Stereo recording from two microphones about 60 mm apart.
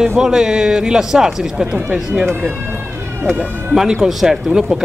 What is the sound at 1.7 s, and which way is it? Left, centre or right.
Speech, centre.